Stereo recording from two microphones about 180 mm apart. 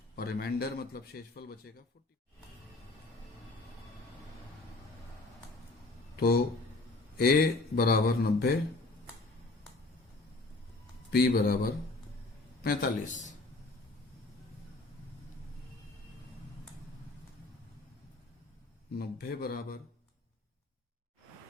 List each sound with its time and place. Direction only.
0.2 s a man's voice: 60° left (ahead or behind)
6.1 s a man's voice: 60° left (ahead or behind)
11.1 s a man's voice: 60° left (ahead or behind)
18.9 s a man's voice: 55° left (ahead or behind)